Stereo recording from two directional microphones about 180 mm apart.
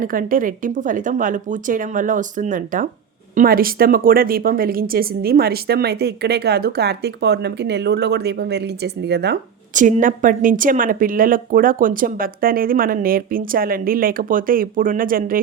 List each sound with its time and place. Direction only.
0.0 s speech: 50° right (ahead or behind); by 9.4 s 65° right (ahead or behind)
9.7 s speech: 45° right (ahead or behind)